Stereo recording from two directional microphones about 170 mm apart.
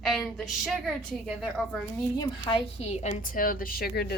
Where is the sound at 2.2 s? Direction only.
30° left (ahead or behind).